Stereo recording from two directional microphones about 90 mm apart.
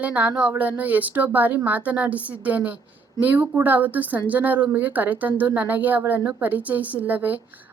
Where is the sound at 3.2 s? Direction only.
20° right (ahead or behind).